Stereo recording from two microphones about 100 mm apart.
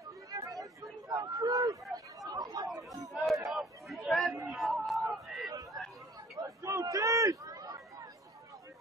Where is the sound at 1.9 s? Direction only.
35° right (ahead or behind).